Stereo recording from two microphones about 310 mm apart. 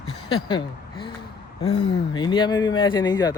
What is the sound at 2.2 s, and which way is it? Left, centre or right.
Speech, centre.